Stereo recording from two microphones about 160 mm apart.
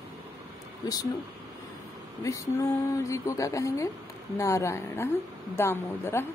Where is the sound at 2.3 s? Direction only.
20° left (ahead or behind).